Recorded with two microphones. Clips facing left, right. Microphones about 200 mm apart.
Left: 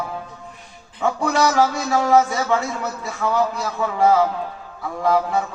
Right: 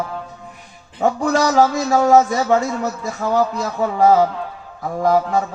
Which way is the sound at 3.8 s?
40° right (ahead or behind).